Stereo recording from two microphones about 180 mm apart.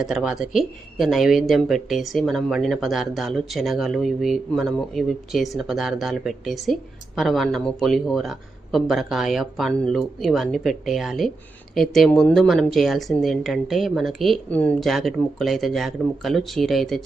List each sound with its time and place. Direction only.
0.0 s speech: 5° right (ahead or behind)